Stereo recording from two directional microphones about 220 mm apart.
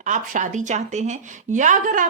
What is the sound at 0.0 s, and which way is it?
A woman's voice, 35° right (ahead or behind).